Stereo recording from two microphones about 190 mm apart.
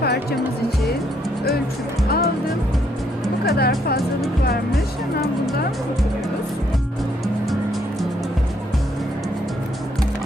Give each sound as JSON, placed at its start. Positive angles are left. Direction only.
{"t": 0.0, "sound": "speech", "side_deg": 55}
{"t": 2.0, "sound": "music", "side_deg": 55}
{"t": 3.4, "sound": "speech", "side_deg": 55}